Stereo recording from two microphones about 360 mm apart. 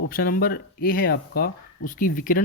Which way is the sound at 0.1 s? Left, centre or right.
Left.